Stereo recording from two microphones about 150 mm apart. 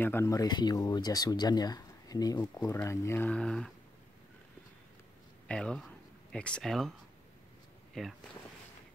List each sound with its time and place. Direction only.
0.0 s speech: 15° left (ahead or behind)
5.5 s speech: 5° left (ahead or behind)
8.0 s speech: centre (ahead or behind)